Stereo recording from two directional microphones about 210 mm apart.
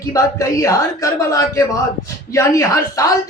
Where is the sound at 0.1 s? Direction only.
15° left (ahead or behind).